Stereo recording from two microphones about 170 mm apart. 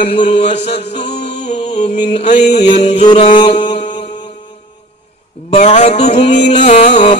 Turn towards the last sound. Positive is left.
turn(degrees=40)  # may be behind; listen again after turning